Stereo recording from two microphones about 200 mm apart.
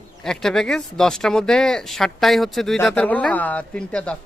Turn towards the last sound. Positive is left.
turn(degrees=5)  # may be behind; listen again after turning